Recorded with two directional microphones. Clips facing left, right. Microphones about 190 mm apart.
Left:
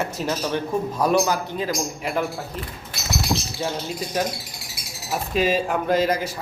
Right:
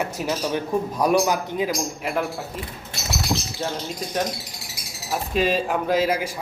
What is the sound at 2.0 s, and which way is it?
Speech, centre (ahead or behind).